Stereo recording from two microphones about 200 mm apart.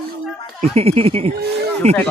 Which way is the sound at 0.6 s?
30° right (ahead or behind).